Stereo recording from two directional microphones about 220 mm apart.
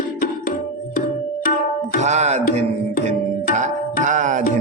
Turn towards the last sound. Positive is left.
turn(degrees=-35)  # may be behind; listen again after turning